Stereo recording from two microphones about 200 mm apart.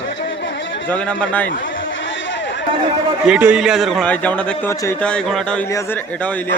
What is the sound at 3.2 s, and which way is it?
A man's voice, 5° right (ahead or behind).